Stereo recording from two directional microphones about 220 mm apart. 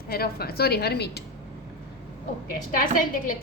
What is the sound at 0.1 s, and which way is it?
A woman's voice, 45° left (ahead or behind).